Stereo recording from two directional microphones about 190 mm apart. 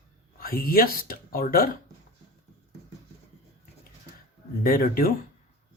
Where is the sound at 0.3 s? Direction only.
50° left (ahead or behind).